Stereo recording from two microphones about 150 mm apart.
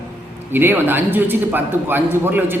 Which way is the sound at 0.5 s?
15° right (ahead or behind).